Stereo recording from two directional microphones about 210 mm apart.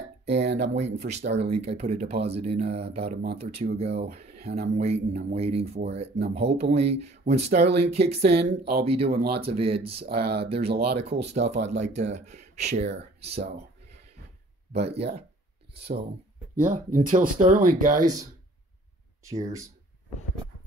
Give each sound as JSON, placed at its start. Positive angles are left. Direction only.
{"t": 0.3, "sound": "speech", "side_deg": -50}
{"t": 0.7, "sound": "speech", "side_deg": -30}
{"t": 10.0, "sound": "speech", "side_deg": -50}
{"t": 10.5, "sound": "speech", "side_deg": -30}
{"t": 16.5, "sound": "speech", "side_deg": -40}
{"t": 18.0, "sound": "speech", "side_deg": -15}